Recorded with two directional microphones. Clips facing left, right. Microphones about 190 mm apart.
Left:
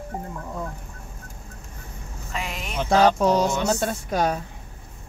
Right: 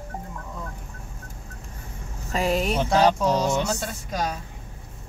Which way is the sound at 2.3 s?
35° right (ahead or behind).